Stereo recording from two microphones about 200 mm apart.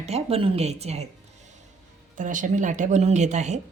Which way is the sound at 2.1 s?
40° right (ahead or behind).